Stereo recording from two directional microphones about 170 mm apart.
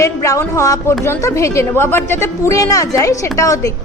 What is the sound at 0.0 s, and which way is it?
A woman's voice, 15° left (ahead or behind).